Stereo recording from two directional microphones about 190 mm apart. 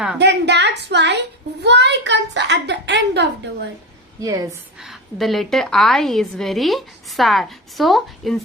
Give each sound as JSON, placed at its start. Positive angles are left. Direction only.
{"t": 0.2, "sound": "a sound", "side_deg": -65}
{"t": 1.6, "sound": "a woman's voice", "side_deg": -65}
{"t": 4.2, "sound": "a woman's voice", "side_deg": -20}
{"t": 4.8, "sound": "a woman's voice", "side_deg": 0}